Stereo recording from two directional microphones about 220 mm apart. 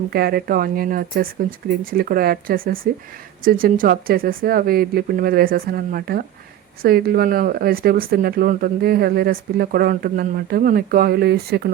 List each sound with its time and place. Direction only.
0.1 s speech: 45° right (ahead or behind)